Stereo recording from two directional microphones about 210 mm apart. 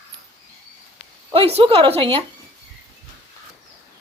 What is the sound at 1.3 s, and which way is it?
Speech, 30° right (ahead or behind).